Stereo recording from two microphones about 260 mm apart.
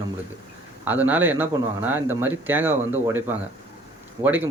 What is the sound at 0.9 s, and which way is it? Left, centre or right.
Speech, centre.